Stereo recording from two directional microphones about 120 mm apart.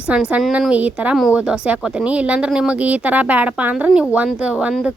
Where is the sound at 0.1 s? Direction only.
10° right (ahead or behind).